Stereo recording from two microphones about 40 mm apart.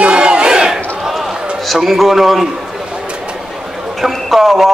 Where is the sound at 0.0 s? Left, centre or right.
Right.